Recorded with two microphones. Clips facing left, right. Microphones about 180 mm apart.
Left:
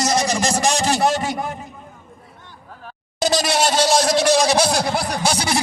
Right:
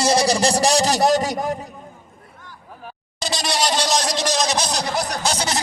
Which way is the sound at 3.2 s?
45° left (ahead or behind).